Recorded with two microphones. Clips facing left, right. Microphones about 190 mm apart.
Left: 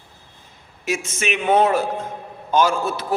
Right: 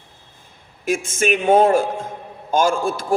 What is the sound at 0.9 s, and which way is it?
A man's voice, 50° right (ahead or behind).